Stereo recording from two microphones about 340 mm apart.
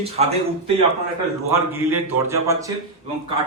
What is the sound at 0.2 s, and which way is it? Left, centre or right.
Speech, centre.